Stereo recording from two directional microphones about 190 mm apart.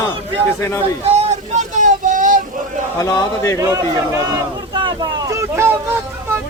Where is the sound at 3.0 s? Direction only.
20° left (ahead or behind).